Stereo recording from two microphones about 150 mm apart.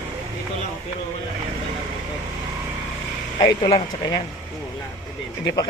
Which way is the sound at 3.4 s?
25° left (ahead or behind).